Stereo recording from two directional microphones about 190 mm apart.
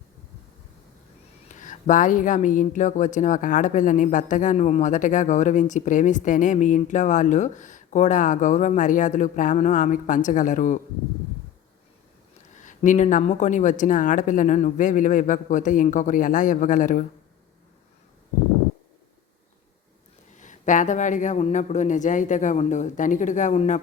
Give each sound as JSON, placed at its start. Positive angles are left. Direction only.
{"t": 1.5, "sound": "speech", "side_deg": 40}
{"t": 12.5, "sound": "speech", "side_deg": 40}
{"t": 20.3, "sound": "speech", "side_deg": 40}